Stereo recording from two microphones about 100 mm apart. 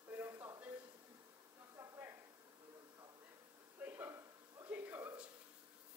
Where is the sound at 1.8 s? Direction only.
25° right (ahead or behind).